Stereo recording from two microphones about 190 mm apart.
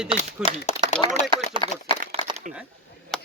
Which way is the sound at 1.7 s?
30° left (ahead or behind).